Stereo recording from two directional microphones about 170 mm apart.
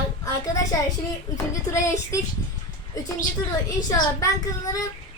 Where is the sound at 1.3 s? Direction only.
20° left (ahead or behind).